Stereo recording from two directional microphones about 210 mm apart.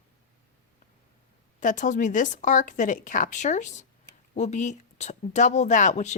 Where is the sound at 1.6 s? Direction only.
35° left (ahead or behind).